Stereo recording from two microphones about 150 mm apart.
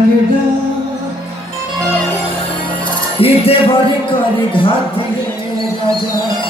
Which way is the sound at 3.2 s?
40° left (ahead or behind).